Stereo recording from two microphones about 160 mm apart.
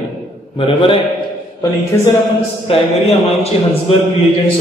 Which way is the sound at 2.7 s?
35° left (ahead or behind).